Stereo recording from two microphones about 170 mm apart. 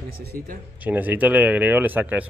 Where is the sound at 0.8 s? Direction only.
10° right (ahead or behind).